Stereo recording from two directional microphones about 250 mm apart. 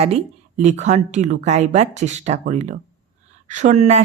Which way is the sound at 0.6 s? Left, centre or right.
Right.